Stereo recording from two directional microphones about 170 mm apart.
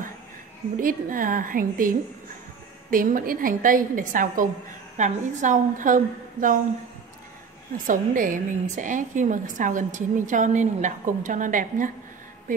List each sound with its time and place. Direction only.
0.7 s a woman's voice: 55° right (ahead or behind)
7.7 s a woman's voice: 50° right (ahead or behind)